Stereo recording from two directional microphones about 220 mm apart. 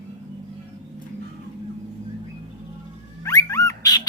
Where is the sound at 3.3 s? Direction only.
15° left (ahead or behind).